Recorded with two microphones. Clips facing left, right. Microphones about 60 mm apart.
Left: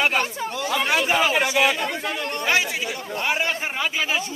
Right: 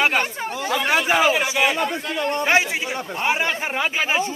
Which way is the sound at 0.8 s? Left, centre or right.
Right.